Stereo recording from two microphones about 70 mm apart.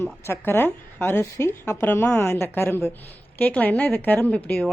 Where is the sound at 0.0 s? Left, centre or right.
Left.